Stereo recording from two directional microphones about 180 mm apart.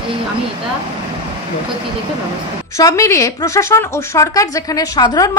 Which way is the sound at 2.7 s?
20° left (ahead or behind).